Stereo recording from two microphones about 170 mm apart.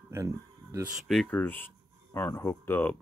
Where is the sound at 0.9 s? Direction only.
Centre (ahead or behind).